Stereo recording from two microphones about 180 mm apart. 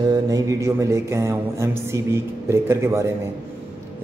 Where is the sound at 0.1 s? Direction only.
20° right (ahead or behind).